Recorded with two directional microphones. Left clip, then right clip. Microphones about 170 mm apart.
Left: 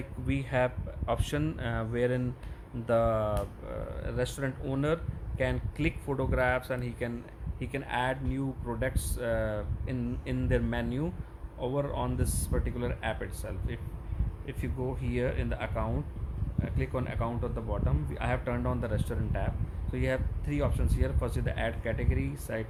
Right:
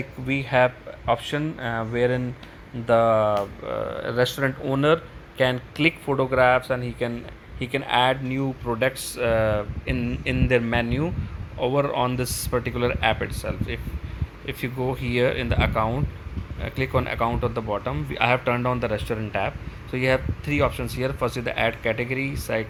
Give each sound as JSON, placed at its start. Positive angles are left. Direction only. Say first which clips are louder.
{"t": 0.3, "sound": "speech", "louder": "right 10 dB", "side_deg": 5}
{"t": 3.7, "sound": "speech", "louder": "right 12 dB", "side_deg": -15}
{"t": 7.6, "sound": "speech", "louder": "right 11 dB", "side_deg": -10}